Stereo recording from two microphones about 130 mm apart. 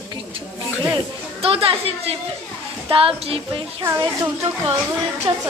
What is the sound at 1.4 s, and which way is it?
Music, 45° right (ahead or behind).